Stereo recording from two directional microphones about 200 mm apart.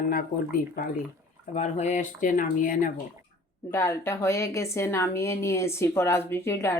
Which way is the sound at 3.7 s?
15° left (ahead or behind).